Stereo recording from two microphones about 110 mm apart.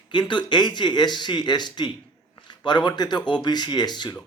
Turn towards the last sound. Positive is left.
turn(degrees=40)  # may be behind; listen again after turning